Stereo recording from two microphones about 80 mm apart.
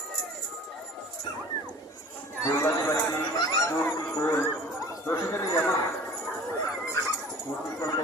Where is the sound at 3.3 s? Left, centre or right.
Left.